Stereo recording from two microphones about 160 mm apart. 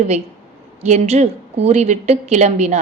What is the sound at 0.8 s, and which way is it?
A woman's voice, 45° right (ahead or behind).